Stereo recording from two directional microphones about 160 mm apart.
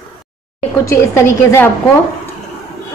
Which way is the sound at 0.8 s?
15° left (ahead or behind).